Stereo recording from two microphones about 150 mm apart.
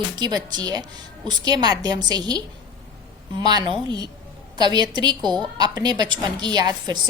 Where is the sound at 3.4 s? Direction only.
30° right (ahead or behind).